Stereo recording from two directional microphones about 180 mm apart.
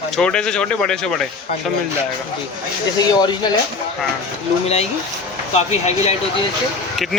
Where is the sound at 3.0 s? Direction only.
25° left (ahead or behind).